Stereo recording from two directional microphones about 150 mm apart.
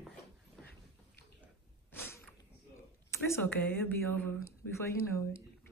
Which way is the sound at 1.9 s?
15° left (ahead or behind).